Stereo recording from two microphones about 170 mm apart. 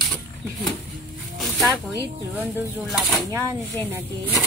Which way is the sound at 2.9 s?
Centre (ahead or behind).